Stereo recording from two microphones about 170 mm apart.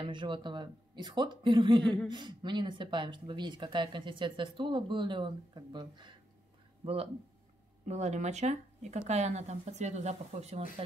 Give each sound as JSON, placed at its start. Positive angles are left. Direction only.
{"t": 0.0, "sound": "speech", "side_deg": -30}